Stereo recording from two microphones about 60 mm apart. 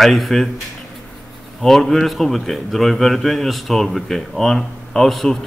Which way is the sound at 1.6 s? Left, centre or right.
Centre.